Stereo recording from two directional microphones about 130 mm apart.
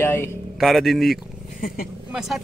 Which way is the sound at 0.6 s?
Centre (ahead or behind).